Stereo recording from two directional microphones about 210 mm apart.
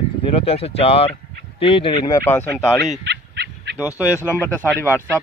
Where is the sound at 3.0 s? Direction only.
55° right (ahead or behind).